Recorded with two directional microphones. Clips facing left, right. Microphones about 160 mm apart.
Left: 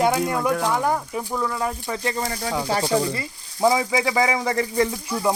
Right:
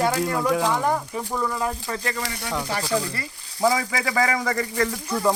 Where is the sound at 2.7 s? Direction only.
25° left (ahead or behind).